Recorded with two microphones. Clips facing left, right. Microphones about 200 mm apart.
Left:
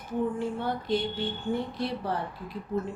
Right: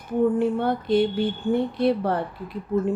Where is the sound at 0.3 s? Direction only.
60° right (ahead or behind).